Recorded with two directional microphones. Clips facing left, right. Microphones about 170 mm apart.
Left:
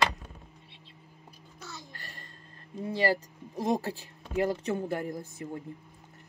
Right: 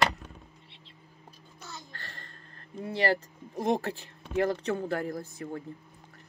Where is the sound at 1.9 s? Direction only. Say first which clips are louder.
Right 1 dB; 15° left (ahead or behind).